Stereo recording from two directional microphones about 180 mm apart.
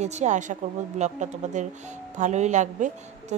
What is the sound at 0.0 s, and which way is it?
A woman's voice, 40° right (ahead or behind).